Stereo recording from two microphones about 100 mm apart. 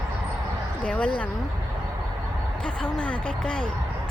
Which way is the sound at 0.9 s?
10° left (ahead or behind).